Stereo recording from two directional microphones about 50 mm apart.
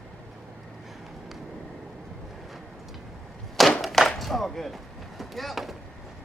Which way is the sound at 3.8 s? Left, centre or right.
Centre.